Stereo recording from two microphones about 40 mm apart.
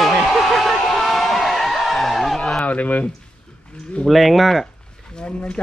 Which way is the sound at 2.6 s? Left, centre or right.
Left.